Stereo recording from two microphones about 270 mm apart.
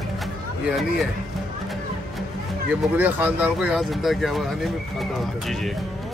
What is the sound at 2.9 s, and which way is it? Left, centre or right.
Speech, centre.